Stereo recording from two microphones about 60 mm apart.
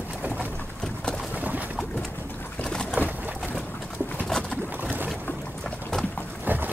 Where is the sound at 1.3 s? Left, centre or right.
Right.